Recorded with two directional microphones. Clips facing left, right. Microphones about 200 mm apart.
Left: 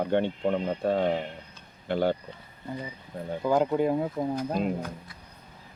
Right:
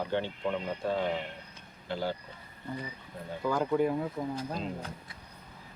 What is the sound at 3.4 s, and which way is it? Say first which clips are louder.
Speech: left 4 dB; 20° left (ahead or behind).